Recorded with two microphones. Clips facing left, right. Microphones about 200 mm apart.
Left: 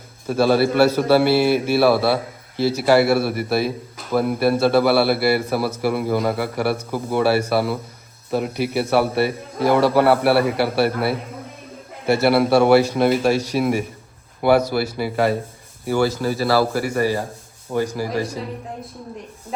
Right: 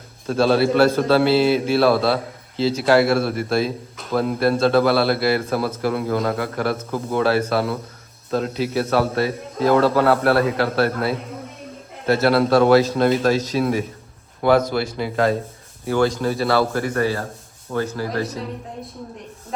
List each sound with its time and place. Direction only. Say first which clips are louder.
0.3 s speech: even; 5° left (ahead or behind)